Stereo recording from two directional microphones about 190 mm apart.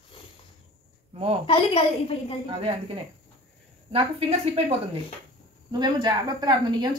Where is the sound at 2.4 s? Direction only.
30° right (ahead or behind).